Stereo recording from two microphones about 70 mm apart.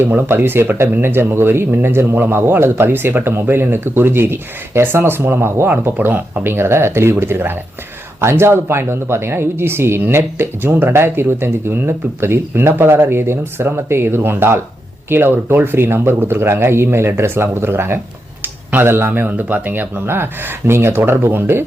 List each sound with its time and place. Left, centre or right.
0.0 s speech: right